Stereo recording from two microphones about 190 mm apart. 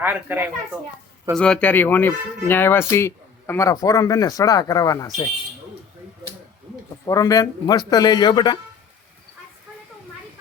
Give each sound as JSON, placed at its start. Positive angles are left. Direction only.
{"t": 0.0, "sound": "speech", "side_deg": -10}
{"t": 1.4, "sound": "speech", "side_deg": 5}
{"t": 7.0, "sound": "a man's voice", "side_deg": 20}